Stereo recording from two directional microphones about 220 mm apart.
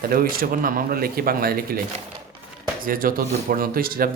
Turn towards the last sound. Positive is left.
turn(degrees=-40)  # may be behind; listen again after turning